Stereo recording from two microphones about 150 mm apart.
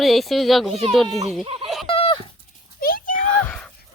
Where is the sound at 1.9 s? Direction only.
35° left (ahead or behind).